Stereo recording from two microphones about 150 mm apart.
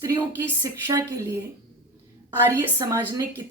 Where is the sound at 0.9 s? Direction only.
20° right (ahead or behind).